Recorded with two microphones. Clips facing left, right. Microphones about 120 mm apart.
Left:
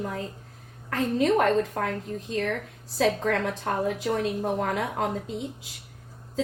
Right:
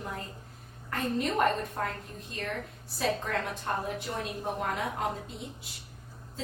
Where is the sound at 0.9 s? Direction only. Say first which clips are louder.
Left 7 dB; 90° left.